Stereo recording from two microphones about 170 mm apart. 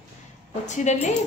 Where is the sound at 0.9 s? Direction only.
45° left (ahead or behind).